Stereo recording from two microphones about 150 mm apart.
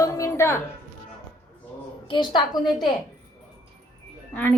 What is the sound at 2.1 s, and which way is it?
Speech, 30° left (ahead or behind).